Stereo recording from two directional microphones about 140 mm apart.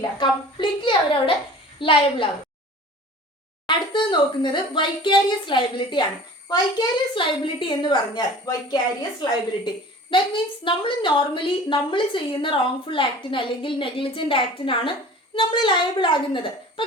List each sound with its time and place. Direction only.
0.2 s a woman's voice: 35° left (ahead or behind)
3.7 s a woman's voice: 35° left (ahead or behind)